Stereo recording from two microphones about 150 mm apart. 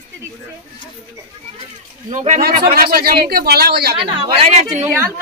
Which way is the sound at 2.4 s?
80° right.